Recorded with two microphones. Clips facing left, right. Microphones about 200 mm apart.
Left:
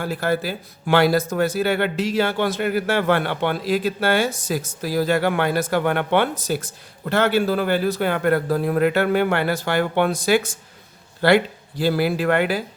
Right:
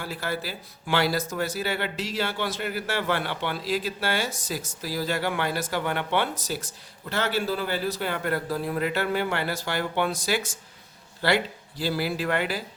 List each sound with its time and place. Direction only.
0.0 s speech: 50° left (ahead or behind)